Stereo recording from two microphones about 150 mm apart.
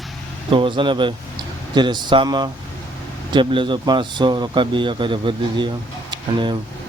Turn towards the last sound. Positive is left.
turn(degrees=-30)  # may be behind; listen again after turning